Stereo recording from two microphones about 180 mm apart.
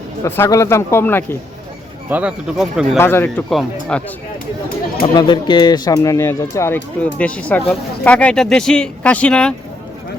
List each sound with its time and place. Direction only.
0.3 s speech: 15° left (ahead or behind)
2.0 s speech: 10° right (ahead or behind)
3.0 s speech: 10° left (ahead or behind)
5.1 s speech: 25° left (ahead or behind); by 9.6 s 5° left (ahead or behind)